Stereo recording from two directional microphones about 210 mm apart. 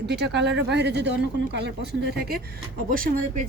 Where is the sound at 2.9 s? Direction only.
40° right (ahead or behind).